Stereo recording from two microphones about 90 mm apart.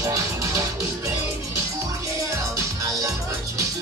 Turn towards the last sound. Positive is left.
turn(degrees=-40)  # may be behind; listen again after turning